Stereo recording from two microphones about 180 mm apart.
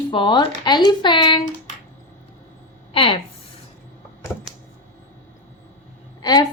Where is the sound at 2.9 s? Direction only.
30° left (ahead or behind).